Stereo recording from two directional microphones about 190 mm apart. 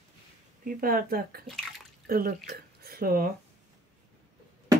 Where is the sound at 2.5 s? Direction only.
55° right (ahead or behind).